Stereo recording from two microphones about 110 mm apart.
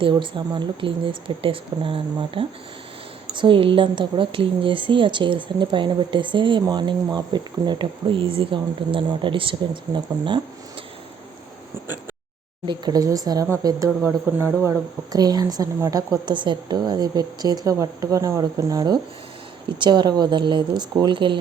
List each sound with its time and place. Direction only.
0.0 s a woman's voice: 45° right (ahead or behind)
12.6 s a woman's voice: 40° right (ahead or behind)
19.6 s a woman's voice: 45° right (ahead or behind)